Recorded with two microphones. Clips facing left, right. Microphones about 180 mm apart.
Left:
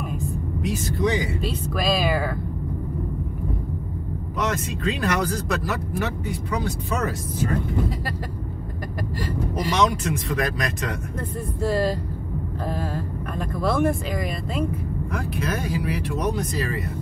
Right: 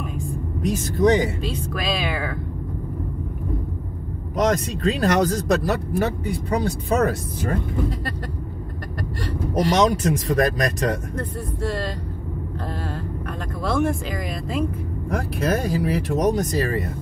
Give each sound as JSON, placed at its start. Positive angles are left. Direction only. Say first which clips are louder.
{"t": 0.6, "sound": "speech", "louder": "right 4 dB", "side_deg": -45}
{"t": 1.7, "sound": "speech", "louder": "left 5 dB", "side_deg": 10}
{"t": 4.4, "sound": "speech", "louder": "right 6 dB", "side_deg": -40}
{"t": 7.0, "sound": "speech", "louder": "right 4 dB", "side_deg": -55}
{"t": 9.8, "sound": "speech", "louder": "right 1 dB", "side_deg": -45}
{"t": 11.1, "sound": "speech", "louder": "even", "side_deg": 5}
{"t": 15.0, "sound": "speech", "louder": "right 6 dB", "side_deg": -40}